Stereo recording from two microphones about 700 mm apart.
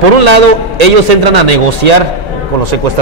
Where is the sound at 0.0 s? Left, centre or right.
Right.